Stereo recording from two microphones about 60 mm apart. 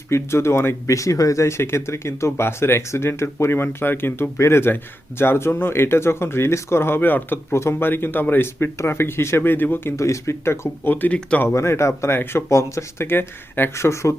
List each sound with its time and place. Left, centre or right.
0.1 s speech: left
7.5 s speech: left
10.0 s speech: left
10.9 s speech: left
11.4 s speech: left
13.1 s speech: left